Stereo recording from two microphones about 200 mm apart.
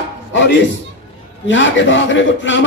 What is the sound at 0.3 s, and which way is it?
A man's voice, 65° left (ahead or behind).